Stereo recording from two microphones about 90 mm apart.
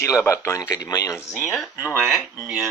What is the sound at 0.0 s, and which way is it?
Speech, 35° left (ahead or behind).